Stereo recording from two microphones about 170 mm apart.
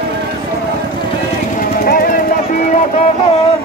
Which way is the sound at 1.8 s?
55° left (ahead or behind).